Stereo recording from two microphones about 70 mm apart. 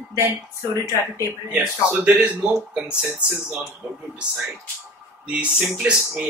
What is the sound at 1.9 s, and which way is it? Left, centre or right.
Speech, right.